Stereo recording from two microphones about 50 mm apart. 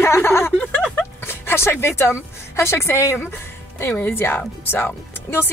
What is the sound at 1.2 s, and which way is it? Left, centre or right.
A woman's voice, left.